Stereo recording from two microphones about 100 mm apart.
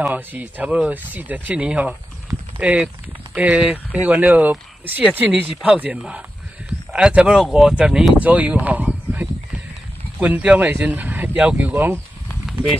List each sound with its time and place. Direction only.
0.0 s speech: 15° right (ahead or behind)